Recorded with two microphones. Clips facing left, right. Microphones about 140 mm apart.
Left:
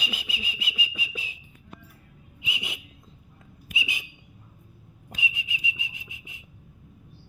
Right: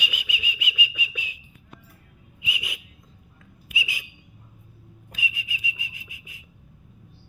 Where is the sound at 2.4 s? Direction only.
25° left (ahead or behind).